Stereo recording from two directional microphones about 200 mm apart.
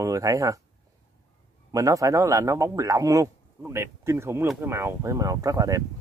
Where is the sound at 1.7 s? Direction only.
15° right (ahead or behind).